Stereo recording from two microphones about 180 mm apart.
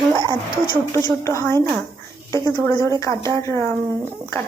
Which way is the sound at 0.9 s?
15° left (ahead or behind).